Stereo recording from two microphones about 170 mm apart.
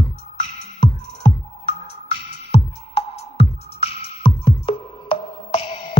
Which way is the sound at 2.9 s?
35° left (ahead or behind).